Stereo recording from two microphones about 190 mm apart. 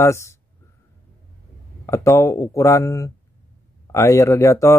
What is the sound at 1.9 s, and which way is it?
Speech, 15° left (ahead or behind).